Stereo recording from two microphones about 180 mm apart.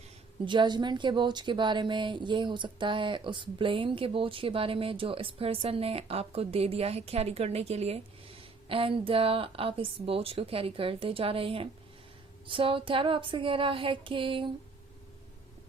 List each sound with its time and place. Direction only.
0.4 s a woman's voice: 25° right (ahead or behind)